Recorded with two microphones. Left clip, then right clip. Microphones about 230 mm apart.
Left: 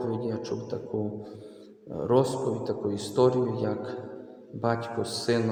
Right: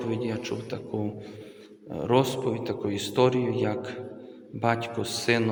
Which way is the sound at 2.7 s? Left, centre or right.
Right.